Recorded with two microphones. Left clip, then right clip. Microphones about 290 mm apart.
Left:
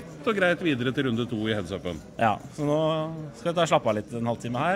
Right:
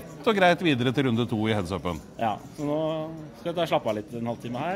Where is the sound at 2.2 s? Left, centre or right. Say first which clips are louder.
Left 5 dB; left.